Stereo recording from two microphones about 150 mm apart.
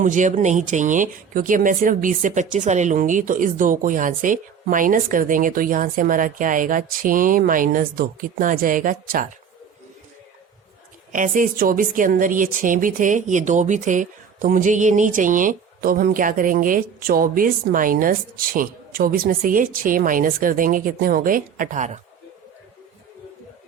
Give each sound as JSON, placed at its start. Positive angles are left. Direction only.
{"t": 0.0, "sound": "speech", "side_deg": -55}
{"t": 11.1, "sound": "speech", "side_deg": -60}